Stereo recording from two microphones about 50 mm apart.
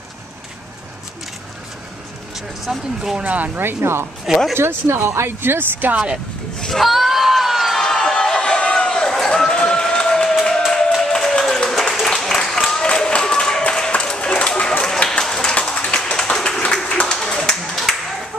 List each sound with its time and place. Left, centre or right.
2.3 s speech: centre
3.2 s speech: right
3.5 s speech: right
6.6 s crowd: centre
7.9 s a sound: centre
11.0 s applause: centre
12.8 s a sound: centre
15.5 s clapping: left
16.7 s applause: centre
17.1 s a sound: centre
17.9 s music: centre